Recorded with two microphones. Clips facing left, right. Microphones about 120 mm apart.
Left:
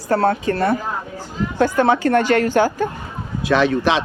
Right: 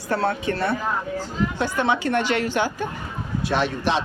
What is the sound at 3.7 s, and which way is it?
Speech, 90° left.